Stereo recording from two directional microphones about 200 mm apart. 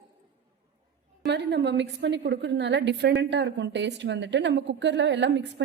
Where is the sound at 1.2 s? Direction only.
60° right (ahead or behind).